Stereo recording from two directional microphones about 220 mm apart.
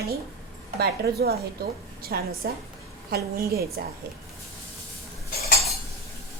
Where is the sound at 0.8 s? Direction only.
45° right (ahead or behind).